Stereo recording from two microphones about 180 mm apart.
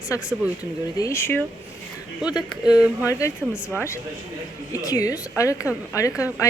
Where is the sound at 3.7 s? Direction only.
15° left (ahead or behind).